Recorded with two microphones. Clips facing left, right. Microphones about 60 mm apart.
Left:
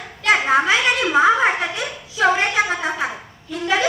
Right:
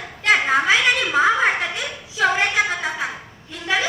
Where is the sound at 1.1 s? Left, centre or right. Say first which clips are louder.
Left 4 dB; centre.